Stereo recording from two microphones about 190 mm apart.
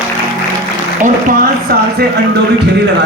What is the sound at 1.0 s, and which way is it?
Speech, 45° right (ahead or behind).